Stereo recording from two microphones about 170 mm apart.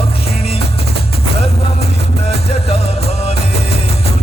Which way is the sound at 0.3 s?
35° left (ahead or behind).